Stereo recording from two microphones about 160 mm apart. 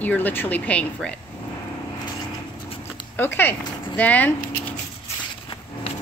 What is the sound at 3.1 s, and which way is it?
Speech, 15° left (ahead or behind).